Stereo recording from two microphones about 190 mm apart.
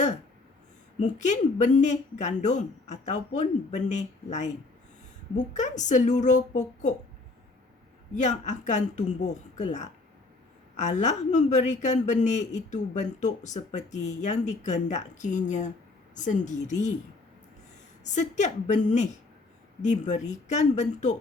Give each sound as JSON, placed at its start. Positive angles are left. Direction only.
{"t": 0.9, "sound": "speech", "side_deg": 40}
{"t": 5.5, "sound": "speech", "side_deg": 40}
{"t": 8.1, "sound": "speech", "side_deg": 40}
{"t": 10.8, "sound": "speech", "side_deg": 35}
{"t": 18.0, "sound": "speech", "side_deg": 40}